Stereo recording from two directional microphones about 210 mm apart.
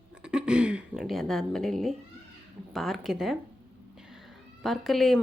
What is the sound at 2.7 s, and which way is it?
Speech, centre (ahead or behind).